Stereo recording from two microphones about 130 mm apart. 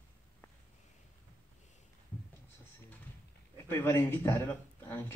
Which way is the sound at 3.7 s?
20° left (ahead or behind).